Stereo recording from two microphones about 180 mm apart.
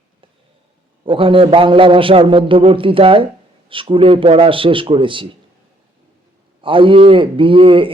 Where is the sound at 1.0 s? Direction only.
30° right (ahead or behind).